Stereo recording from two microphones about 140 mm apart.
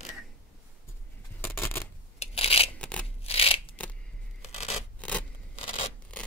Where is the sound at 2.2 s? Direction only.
45° left (ahead or behind).